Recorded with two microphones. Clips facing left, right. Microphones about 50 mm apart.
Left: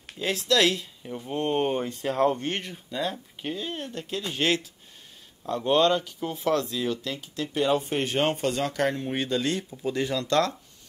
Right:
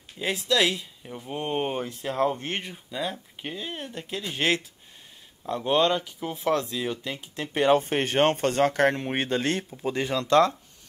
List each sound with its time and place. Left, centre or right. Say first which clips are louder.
0.2 s speech: left 1 dB; centre
6.4 s speech: even; right
7.5 s speech: right 3 dB; right